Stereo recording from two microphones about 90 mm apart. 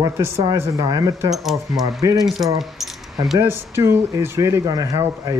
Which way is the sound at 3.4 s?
25° right (ahead or behind).